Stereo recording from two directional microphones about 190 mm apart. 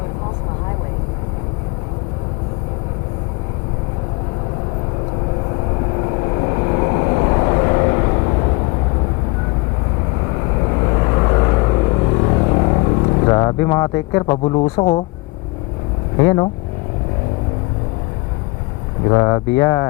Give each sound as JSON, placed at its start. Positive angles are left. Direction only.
{"t": 6.0, "sound": "vehicle", "side_deg": 30}
{"t": 10.6, "sound": "vehicle", "side_deg": 25}
{"t": 16.1, "sound": "speech", "side_deg": 20}
{"t": 19.0, "sound": "speech", "side_deg": 20}